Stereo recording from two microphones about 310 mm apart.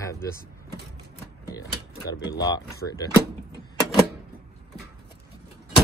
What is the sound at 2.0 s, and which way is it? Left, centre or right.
Speech, left.